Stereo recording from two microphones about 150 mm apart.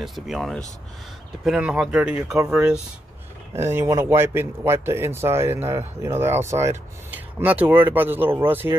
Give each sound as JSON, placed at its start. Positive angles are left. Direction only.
{"t": 0.0, "sound": "speech", "side_deg": 0}
{"t": 3.5, "sound": "speech", "side_deg": -15}